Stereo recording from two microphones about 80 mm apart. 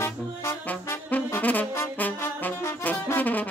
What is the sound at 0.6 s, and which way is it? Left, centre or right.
Brass instrument, centre.